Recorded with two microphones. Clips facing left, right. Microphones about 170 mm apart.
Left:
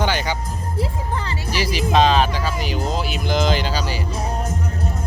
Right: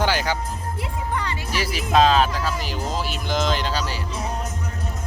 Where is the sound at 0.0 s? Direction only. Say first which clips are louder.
Even; 5° right (ahead or behind).